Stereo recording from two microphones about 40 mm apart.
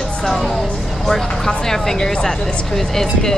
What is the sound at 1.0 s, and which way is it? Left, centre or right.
Speech, centre.